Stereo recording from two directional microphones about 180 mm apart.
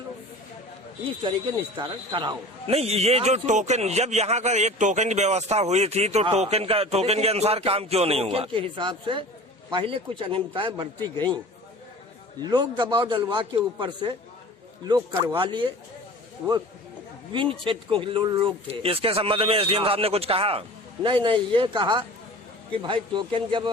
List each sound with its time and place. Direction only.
1.7 s a man's voice: 25° right (ahead or behind)
12.4 s a man's voice: 25° right (ahead or behind)
17.3 s a man's voice: 25° right (ahead or behind)